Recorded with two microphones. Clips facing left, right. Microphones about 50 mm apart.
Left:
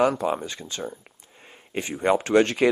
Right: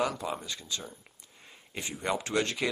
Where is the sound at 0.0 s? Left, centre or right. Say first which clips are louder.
Left 9 dB; left.